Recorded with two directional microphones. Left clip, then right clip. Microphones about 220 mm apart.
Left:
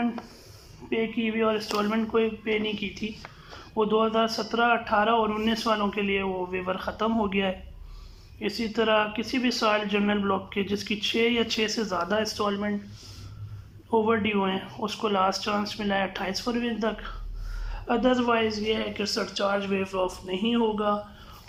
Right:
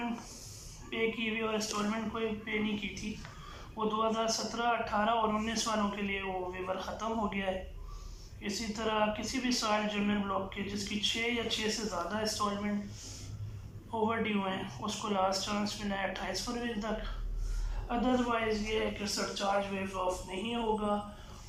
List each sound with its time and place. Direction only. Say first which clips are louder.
0.9 s a man's voice: left 5 dB; 40° left (ahead or behind)
13.9 s speech: left 9 dB; 40° left (ahead or behind)